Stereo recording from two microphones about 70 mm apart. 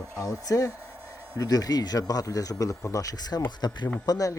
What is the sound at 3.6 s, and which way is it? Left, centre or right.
Speech, left.